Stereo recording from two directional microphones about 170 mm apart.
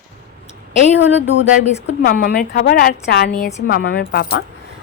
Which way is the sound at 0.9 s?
90° left.